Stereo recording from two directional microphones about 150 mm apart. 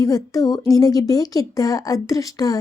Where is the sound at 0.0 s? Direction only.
25° left (ahead or behind).